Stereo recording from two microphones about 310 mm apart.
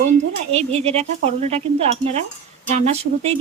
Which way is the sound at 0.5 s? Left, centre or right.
Centre.